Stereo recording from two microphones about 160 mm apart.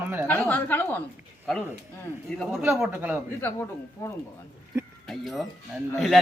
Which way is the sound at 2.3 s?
Centre (ahead or behind).